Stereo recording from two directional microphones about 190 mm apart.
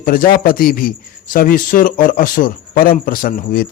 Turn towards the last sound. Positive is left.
turn(degrees=50)  # may be behind; listen again after turning